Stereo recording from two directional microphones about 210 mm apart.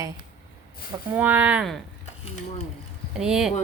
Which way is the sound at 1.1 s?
10° right (ahead or behind).